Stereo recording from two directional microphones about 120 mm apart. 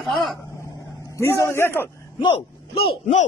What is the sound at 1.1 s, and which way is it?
Speech, 25° left (ahead or behind).